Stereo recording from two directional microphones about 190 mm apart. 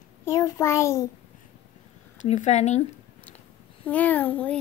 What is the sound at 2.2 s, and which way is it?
Speech, 40° left (ahead or behind).